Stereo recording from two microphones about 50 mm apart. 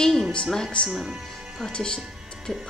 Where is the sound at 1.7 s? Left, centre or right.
Centre.